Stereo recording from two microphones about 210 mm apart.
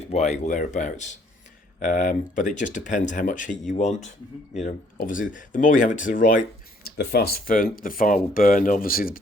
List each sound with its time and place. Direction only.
0.1 s speech: 30° left (ahead or behind)